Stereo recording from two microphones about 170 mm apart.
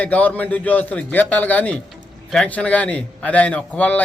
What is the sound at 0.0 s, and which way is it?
A man's voice, 10° left (ahead or behind).